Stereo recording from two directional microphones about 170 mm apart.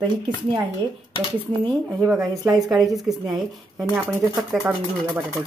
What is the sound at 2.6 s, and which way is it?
Speech, centre (ahead or behind).